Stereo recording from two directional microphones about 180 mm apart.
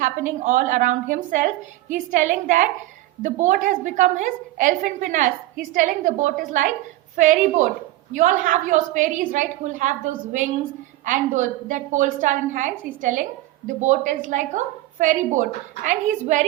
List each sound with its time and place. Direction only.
0.0 s a woman's voice: 45° right (ahead or behind)